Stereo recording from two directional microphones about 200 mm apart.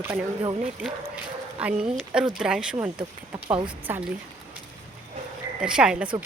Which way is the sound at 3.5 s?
25° right (ahead or behind).